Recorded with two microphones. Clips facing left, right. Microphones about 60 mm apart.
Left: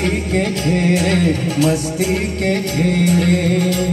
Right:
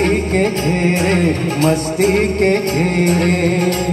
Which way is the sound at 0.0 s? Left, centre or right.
Right.